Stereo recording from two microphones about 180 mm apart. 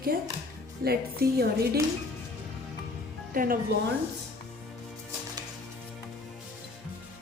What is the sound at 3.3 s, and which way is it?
Speech, 50° right (ahead or behind).